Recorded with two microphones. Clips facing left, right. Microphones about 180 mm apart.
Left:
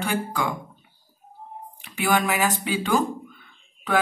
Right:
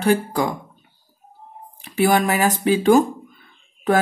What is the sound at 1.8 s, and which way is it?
Speech, 40° right (ahead or behind).